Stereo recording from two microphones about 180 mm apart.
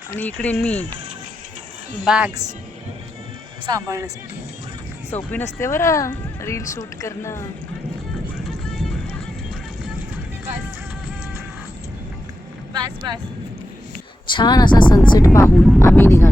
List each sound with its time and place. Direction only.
0.2 s speech: 10° left (ahead or behind)
2.0 s speech: 5° right (ahead or behind)
3.7 s speech: 20° right (ahead or behind)
5.3 s speech: 15° left (ahead or behind)
12.7 s vehicle: 20° right (ahead or behind)
14.3 s a woman's voice: 25° left (ahead or behind)
15.5 s vehicle: centre (ahead or behind)
15.9 s vehicle: 10° left (ahead or behind)